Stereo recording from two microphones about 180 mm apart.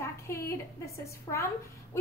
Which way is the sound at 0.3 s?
15° left (ahead or behind).